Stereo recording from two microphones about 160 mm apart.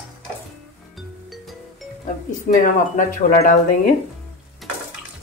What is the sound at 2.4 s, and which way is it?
Speech, 60° left (ahead or behind).